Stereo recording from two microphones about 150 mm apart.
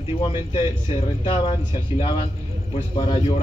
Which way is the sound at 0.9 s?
35° left (ahead or behind).